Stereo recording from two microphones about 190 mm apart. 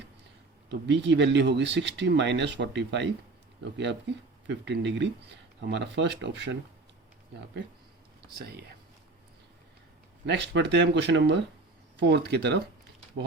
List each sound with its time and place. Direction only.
0.7 s speech: 70° right (ahead or behind)
8.2 s speech: 55° right (ahead or behind)
10.2 s speech: 70° right (ahead or behind)